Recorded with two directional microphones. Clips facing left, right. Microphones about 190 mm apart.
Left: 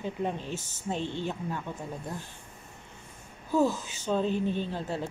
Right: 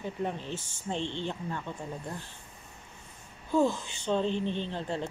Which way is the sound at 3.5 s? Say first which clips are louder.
Even; 5° left (ahead or behind).